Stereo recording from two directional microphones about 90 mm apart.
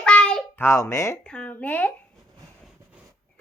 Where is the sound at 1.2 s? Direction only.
10° left (ahead or behind).